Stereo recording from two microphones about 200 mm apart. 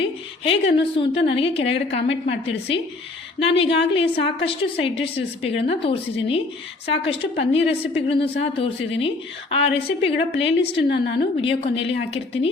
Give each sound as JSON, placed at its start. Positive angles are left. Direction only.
{"t": 0.0, "sound": "a woman's voice", "side_deg": 25}
{"t": 10.8, "sound": "a woman's voice", "side_deg": 60}
{"t": 11.3, "sound": "a woman's voice", "side_deg": 30}